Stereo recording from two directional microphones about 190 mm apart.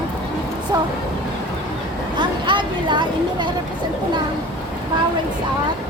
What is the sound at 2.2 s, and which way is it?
Speech, 25° right (ahead or behind).